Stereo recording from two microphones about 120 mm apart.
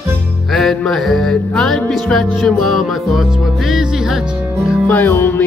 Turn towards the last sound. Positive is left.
turn(degrees=20)  # may be behind; listen again after turning